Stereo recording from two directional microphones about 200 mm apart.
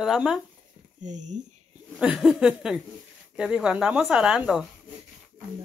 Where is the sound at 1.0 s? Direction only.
35° right (ahead or behind).